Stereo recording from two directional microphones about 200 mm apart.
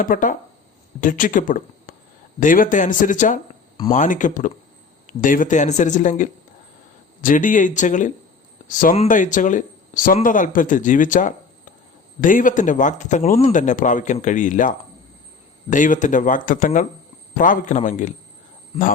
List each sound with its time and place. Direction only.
0.0 s speech: 40° left (ahead or behind)